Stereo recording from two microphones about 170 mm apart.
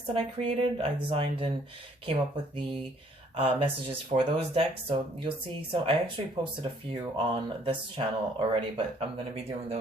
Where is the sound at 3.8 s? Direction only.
30° right (ahead or behind).